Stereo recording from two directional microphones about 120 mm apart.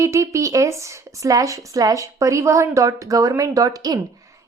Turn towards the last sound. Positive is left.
turn(degrees=-30)  # may be behind; listen again after turning